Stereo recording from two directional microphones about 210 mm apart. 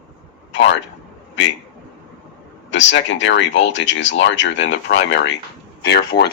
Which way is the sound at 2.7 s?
60° left (ahead or behind).